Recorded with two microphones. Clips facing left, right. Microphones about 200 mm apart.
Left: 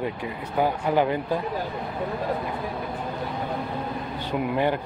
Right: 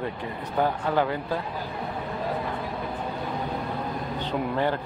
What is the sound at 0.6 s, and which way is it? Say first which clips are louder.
Speech: left 2 dB; 15° left (ahead or behind).